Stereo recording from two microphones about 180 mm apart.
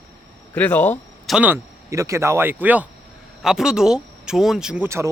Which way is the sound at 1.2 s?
5° right (ahead or behind).